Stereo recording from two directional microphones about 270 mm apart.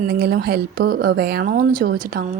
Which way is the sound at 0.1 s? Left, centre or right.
Right.